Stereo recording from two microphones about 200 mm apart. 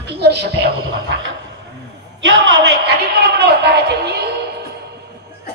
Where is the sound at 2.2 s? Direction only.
65° right (ahead or behind).